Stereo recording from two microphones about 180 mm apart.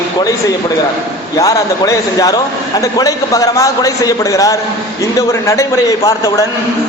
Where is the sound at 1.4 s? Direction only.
20° left (ahead or behind).